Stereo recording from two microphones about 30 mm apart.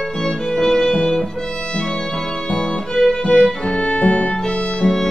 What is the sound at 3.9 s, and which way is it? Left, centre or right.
Music, left.